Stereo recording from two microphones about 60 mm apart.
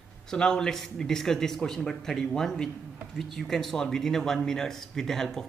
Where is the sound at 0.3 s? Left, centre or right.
Centre.